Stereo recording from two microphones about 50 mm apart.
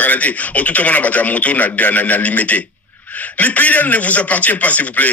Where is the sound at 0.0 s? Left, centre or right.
Left.